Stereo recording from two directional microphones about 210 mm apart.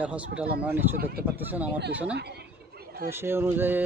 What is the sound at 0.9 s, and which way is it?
Speech, 45° right (ahead or behind).